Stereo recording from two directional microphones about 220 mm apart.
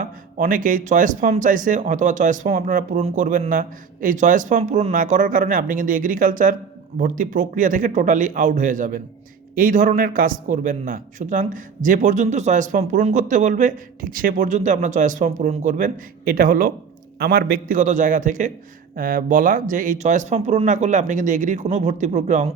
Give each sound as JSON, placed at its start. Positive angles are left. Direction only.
{"t": 0.0, "sound": "a man's voice", "side_deg": -40}